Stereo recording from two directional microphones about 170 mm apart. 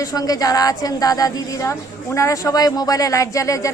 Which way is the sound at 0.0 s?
20° left (ahead or behind).